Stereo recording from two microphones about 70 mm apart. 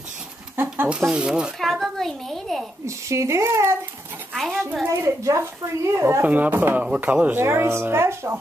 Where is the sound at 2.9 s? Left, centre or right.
Right.